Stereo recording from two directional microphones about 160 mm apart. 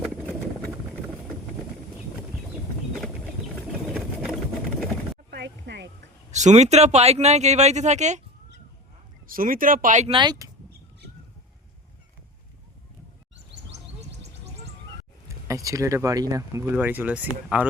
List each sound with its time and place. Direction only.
3.9 s sewing machine: centre (ahead or behind)
5.3 s a sound: 90° right
6.3 s speech: 45° right (ahead or behind)
9.2 s speech: 60° right (ahead or behind)
10.1 s speech: 30° right (ahead or behind)
15.4 s speech: 20° right (ahead or behind)